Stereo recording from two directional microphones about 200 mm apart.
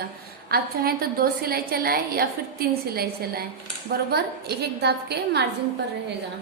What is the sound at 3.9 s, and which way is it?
A woman's voice, 55° right (ahead or behind).